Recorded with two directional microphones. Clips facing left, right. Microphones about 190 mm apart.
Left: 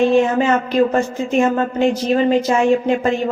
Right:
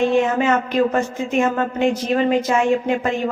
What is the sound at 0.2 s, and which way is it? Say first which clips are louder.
A woman's voice: left 2 dB; 30° left (ahead or behind).